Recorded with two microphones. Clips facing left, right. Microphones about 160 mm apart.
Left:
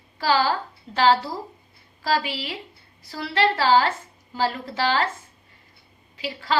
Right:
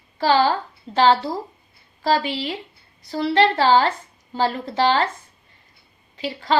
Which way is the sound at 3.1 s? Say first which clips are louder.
Right 5 dB; 30° right (ahead or behind).